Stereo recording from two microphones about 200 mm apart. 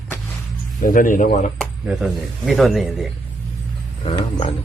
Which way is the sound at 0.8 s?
40° left (ahead or behind).